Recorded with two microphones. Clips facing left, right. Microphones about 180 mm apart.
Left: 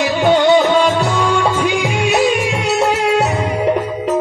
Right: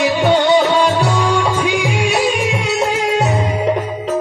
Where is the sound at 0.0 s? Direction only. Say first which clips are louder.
Left 1 dB; 55° left (ahead or behind).